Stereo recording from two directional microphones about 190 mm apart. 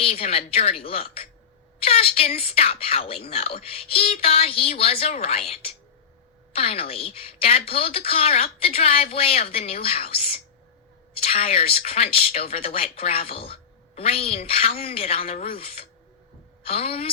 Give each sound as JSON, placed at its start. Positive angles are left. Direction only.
{"t": 0.0, "sound": "speech", "side_deg": 30}